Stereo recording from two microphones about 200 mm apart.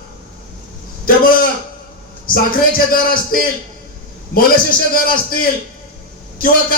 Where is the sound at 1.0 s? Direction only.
45° left (ahead or behind).